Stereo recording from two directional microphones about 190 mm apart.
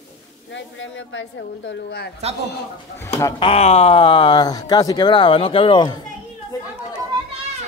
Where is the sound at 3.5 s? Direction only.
30° left (ahead or behind).